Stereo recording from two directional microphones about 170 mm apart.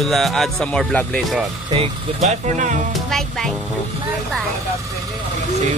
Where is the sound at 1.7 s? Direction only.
40° right (ahead or behind).